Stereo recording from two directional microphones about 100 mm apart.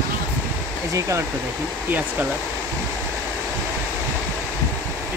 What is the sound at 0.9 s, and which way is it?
Speech, 35° right (ahead or behind).